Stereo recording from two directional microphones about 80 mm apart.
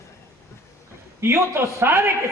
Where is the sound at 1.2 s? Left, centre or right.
Right.